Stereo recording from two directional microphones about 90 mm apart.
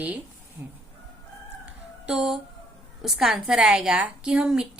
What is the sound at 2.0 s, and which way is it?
A woman's voice, 5° right (ahead or behind).